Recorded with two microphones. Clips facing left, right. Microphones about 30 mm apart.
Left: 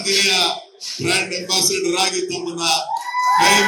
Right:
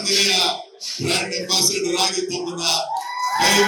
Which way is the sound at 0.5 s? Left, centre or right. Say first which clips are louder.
Left 1 dB; centre.